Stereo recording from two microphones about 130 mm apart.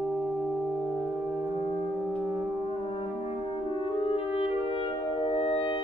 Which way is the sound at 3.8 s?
45° left (ahead or behind).